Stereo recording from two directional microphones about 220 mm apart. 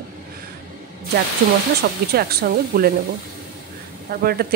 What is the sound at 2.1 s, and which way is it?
Speech, 45° right (ahead or behind).